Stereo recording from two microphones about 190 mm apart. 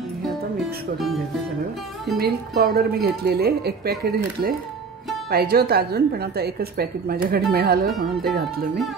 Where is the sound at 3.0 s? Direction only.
55° right (ahead or behind).